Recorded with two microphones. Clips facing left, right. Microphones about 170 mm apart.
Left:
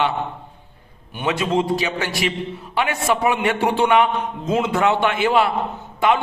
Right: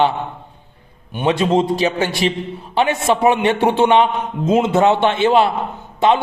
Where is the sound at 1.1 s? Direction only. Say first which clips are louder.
Right 5 dB; 30° right (ahead or behind).